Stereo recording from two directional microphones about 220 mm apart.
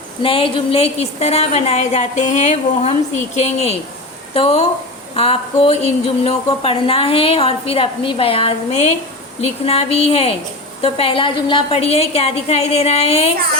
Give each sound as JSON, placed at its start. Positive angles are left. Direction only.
{"t": 0.2, "sound": "speech", "side_deg": 25}